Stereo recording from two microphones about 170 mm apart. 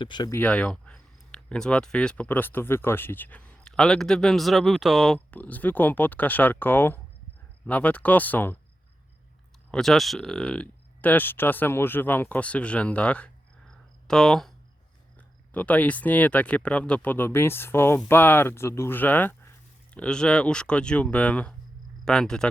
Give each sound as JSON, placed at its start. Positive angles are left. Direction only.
{"t": 0.0, "sound": "speech", "side_deg": 25}
{"t": 0.3, "sound": "speech", "side_deg": 10}
{"t": 9.7, "sound": "speech", "side_deg": 0}
{"t": 15.5, "sound": "speech", "side_deg": 10}